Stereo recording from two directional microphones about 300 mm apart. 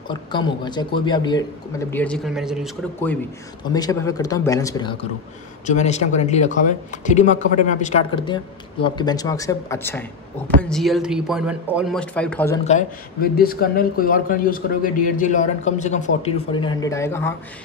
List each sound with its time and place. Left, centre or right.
0.1 s speech: centre
5.7 s a man's voice: left; by 12.5 s centre
12.6 s a man's voice: left; by 17.3 s centre